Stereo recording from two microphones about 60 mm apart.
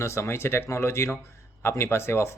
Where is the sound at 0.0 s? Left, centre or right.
Left.